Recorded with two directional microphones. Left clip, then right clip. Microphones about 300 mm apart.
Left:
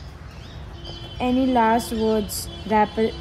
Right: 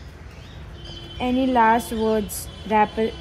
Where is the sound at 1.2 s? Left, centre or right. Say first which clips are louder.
Right 1 dB; centre.